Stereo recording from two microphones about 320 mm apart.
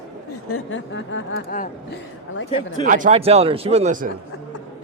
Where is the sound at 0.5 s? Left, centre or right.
Left.